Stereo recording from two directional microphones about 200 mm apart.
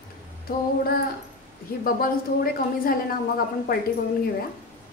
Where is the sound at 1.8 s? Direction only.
45° left (ahead or behind).